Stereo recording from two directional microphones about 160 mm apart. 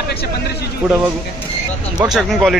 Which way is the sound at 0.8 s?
10° right (ahead or behind).